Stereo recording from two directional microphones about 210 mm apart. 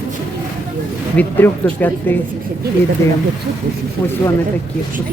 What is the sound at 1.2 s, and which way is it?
Speech, 10° left (ahead or behind).